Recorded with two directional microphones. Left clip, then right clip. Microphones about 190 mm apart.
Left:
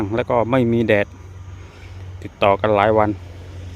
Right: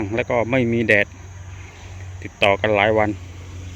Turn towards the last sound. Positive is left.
turn(degrees=15)  # may be behind; listen again after turning